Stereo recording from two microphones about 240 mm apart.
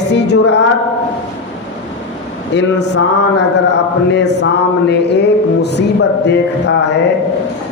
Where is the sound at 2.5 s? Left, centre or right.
Left.